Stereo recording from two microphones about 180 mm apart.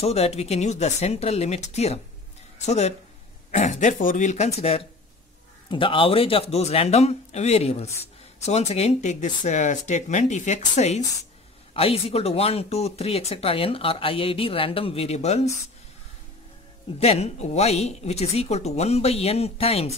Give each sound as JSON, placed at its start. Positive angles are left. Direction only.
{"t": 0.0, "sound": "speech", "side_deg": 35}
{"t": 17.0, "sound": "speech", "side_deg": 35}